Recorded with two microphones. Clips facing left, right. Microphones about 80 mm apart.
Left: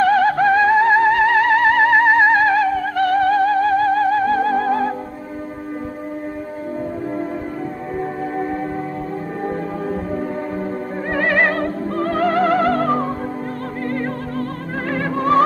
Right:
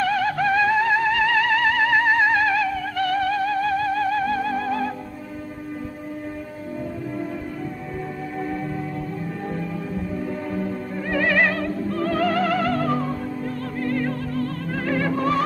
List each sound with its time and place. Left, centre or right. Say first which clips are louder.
0.0 s music: left 7 dB; left
9.5 s music: left 7 dB; left